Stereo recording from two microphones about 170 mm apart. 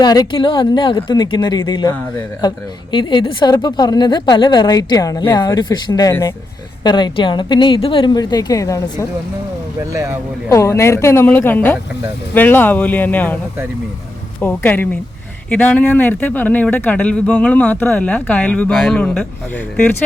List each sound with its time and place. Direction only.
0.0 s a woman's voice: 25° left (ahead or behind)
2.9 s a woman's voice: 30° left (ahead or behind)
9.9 s speech: 15° right (ahead or behind)
10.5 s speech: 15° left (ahead or behind)
14.4 s speech: 10° left (ahead or behind)